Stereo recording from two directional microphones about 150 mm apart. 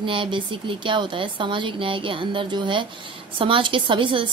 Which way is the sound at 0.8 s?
35° right (ahead or behind).